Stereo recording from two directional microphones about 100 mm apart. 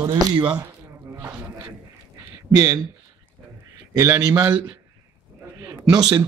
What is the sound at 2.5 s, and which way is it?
Speech, 40° right (ahead or behind).